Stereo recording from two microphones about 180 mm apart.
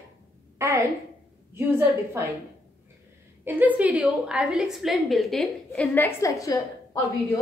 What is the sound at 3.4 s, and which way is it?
A woman's voice, 10° right (ahead or behind).